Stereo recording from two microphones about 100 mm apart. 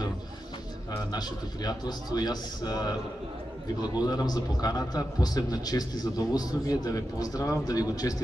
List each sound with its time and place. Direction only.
0.9 s a man's voice: 45° left (ahead or behind)